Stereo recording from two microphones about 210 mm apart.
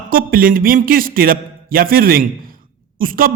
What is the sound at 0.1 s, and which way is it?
A man's voice, 45° right (ahead or behind).